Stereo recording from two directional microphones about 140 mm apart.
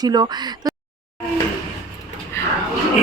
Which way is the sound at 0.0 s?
30° right (ahead or behind).